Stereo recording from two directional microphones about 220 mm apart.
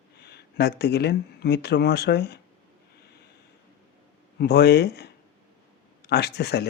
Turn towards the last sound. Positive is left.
turn(degrees=50)  # may be behind; listen again after turning